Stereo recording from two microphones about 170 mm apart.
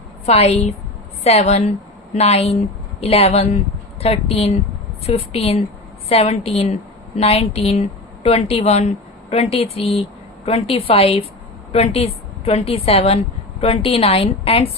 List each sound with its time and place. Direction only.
0.3 s speech: 40° left (ahead or behind)